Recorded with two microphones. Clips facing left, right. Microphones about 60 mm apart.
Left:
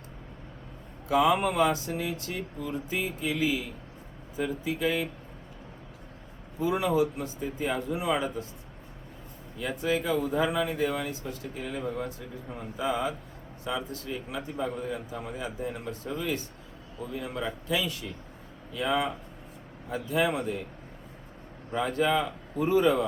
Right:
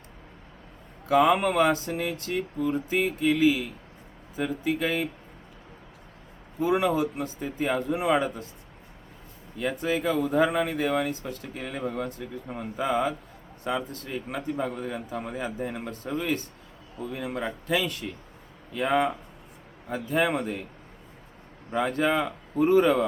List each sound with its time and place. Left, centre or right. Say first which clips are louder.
1.0 s a man's voice: right 3 dB; right
3.0 s mantra: right 9 dB; right
3.3 s a man's voice: right 6 dB; right
6.6 s a man's voice: right 2 dB; right
9.6 s speech: right 2 dB; right
10.0 s a man's voice: right 4 dB; right
21.7 s a man's voice: right 1 dB; right